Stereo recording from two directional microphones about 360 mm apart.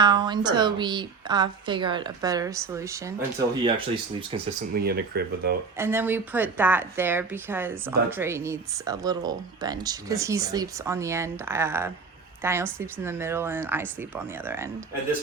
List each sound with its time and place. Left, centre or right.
0.0 s a woman's voice: centre
4.7 s speech: right
5.7 s a woman's voice: centre